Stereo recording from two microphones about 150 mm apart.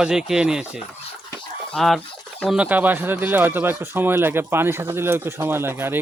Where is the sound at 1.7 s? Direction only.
Centre (ahead or behind).